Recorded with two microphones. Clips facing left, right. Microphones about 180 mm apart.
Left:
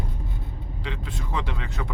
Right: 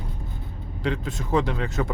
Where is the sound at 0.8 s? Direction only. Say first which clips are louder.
Right 8 dB; 40° right (ahead or behind).